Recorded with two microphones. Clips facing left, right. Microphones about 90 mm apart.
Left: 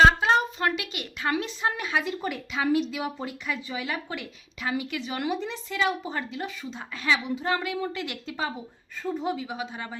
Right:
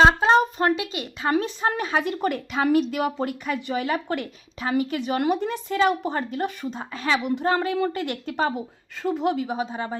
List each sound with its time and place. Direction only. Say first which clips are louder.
0.0 s a sound: right 2 dB; 30° right (ahead or behind)
0.8 s a woman's voice: right 4 dB; 25° right (ahead or behind)
1.3 s a woman's voice: right 5 dB; 40° right (ahead or behind)
2.0 s a woman's voice: right 6 dB; 60° right (ahead or behind)
8.5 s a woman's voice: right 7 dB; 90° right; by 9.5 s 65° right (ahead or behind)
9.5 s a woman's voice: right 7 dB; 35° right (ahead or behind)